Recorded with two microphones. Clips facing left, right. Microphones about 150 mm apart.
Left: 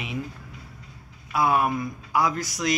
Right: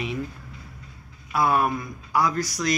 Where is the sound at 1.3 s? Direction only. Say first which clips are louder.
Even; 10° left (ahead or behind).